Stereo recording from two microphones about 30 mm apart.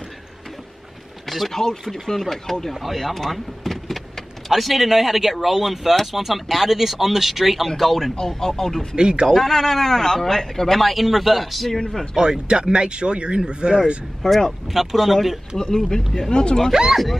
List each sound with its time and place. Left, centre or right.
1.5 s speech: centre
1.9 s speech: centre
2.7 s a man's voice: centre
7.6 s speech: centre
8.9 s speech: right
9.4 s a man's voice: centre
12.2 s speech: right
14.2 s speech: centre
14.7 s speech: centre
15.5 s speech: left